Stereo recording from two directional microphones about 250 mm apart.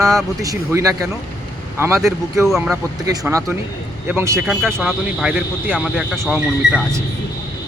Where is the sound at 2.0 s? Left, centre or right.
Centre.